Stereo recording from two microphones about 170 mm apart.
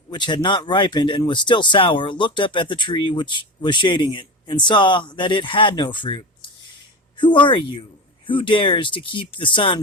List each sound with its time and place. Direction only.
0.1 s speech: 25° left (ahead or behind)